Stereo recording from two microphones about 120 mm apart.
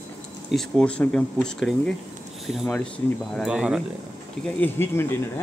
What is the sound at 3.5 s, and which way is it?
Speech, 5° right (ahead or behind).